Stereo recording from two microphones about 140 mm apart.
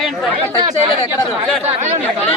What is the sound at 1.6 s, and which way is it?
Speech, 50° right (ahead or behind).